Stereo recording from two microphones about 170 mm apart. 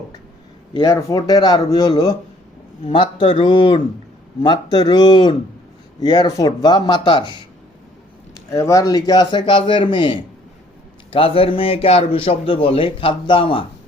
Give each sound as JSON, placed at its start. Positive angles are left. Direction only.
{"t": 0.7, "sound": "a man's voice", "side_deg": 25}
{"t": 8.4, "sound": "a man's voice", "side_deg": 15}